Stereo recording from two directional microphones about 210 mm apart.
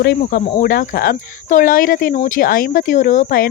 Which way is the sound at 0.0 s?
45° left (ahead or behind).